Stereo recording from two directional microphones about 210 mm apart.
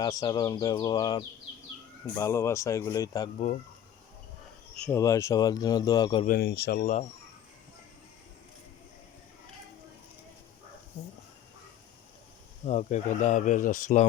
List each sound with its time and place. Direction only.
0.0 s speech: 15° left (ahead or behind)
3.3 s speech: 35° left (ahead or behind)
4.9 s speech: 15° left (ahead or behind)
6.2 s speech: 50° left (ahead or behind)
12.6 s speech: 35° left (ahead or behind)